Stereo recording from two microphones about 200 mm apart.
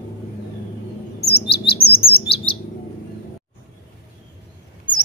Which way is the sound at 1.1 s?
55° left (ahead or behind).